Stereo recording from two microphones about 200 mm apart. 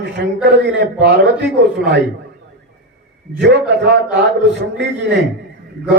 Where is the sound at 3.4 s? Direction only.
60° right (ahead or behind).